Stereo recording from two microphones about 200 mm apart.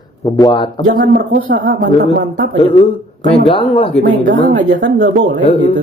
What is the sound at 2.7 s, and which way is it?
Speech, 25° left (ahead or behind).